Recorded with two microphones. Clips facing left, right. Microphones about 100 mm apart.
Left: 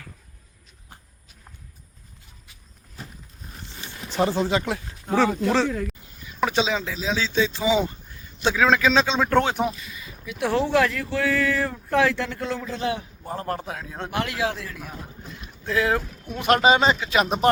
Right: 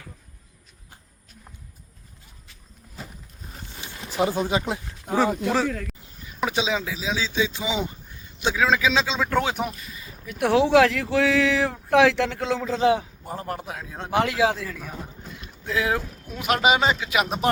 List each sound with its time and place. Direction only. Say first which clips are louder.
3.7 s a sound: even; 10° right (ahead or behind)
4.0 s speech: left 1 dB; 5° right (ahead or behind)
5.3 s a man's voice: left 2 dB; 5° right (ahead or behind)
8.6 s speech: left 2 dB; 5° right (ahead or behind)
9.7 s a sound: left 1 dB; 35° right (ahead or behind)
10.2 s speech: right 3 dB; 60° right (ahead or behind); by 12.7 s 90° right
13.2 s speech: left 2 dB; 15° right (ahead or behind)
15.6 s speech: left 2 dB; 15° right (ahead or behind)